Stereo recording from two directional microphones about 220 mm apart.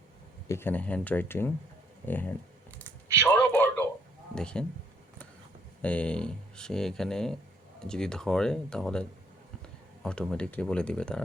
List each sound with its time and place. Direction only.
0.4 s speech: 10° left (ahead or behind)
2.7 s a sound: 5° left (ahead or behind)
4.4 s speech: 5° left (ahead or behind)
5.8 s speech: 5° left (ahead or behind)